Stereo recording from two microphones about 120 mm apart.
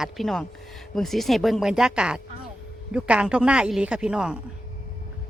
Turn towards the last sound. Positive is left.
turn(degrees=-5)  # may be behind; listen again after turning